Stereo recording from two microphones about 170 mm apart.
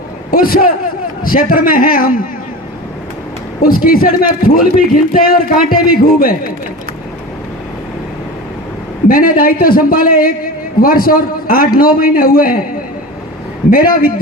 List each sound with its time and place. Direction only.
0.3 s a man's voice: 60° left (ahead or behind)
3.6 s a man's voice: 60° left (ahead or behind)
9.0 s a man's voice: 55° left (ahead or behind)
13.7 s a man's voice: 60° left (ahead or behind)